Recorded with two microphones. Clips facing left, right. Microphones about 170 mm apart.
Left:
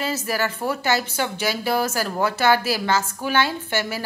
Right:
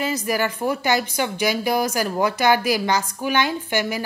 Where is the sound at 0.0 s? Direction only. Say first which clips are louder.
Right 2 dB; 15° right (ahead or behind).